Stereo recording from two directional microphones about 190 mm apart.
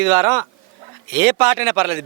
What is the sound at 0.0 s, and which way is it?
A man's voice, 10° right (ahead or behind).